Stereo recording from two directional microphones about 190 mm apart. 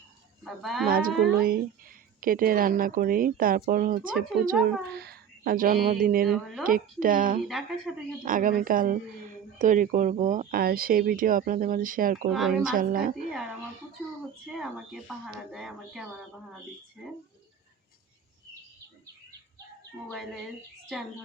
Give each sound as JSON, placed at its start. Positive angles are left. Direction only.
{"t": 0.4, "sound": "speech", "side_deg": 0}
{"t": 0.9, "sound": "speech", "side_deg": -50}
{"t": 6.2, "sound": "speech", "side_deg": 0}
{"t": 6.7, "sound": "speech", "side_deg": -45}
{"t": 7.4, "sound": "speech", "side_deg": 0}
{"t": 8.2, "sound": "speech", "side_deg": -45}
{"t": 12.3, "sound": "speech", "side_deg": 0}
{"t": 12.7, "sound": "speech", "side_deg": -45}
{"t": 14.4, "sound": "speech", "side_deg": 0}